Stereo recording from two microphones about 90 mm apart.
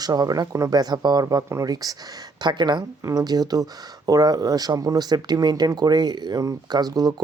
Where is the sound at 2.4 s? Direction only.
55° right (ahead or behind).